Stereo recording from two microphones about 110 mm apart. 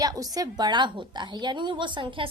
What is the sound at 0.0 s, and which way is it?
A woman's voice, 35° right (ahead or behind).